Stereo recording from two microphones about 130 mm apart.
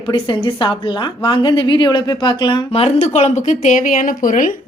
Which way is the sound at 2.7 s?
55° left (ahead or behind).